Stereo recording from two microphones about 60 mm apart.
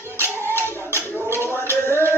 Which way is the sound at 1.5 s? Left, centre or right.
Left.